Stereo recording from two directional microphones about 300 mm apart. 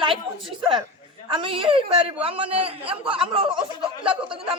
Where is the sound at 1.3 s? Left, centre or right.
Centre.